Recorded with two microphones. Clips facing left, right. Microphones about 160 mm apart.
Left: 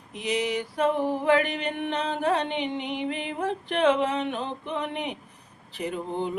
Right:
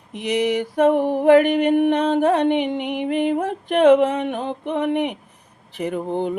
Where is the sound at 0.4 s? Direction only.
65° right (ahead or behind).